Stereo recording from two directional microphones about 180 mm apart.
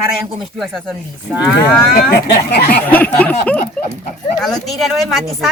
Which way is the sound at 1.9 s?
60° left (ahead or behind).